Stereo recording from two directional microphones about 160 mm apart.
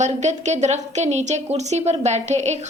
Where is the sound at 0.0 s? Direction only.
45° right (ahead or behind).